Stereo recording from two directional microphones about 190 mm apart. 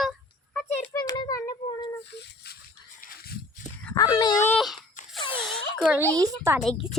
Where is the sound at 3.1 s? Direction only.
50° left (ahead or behind).